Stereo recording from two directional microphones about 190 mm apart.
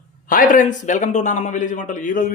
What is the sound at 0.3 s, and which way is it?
A man's voice, 45° left (ahead or behind).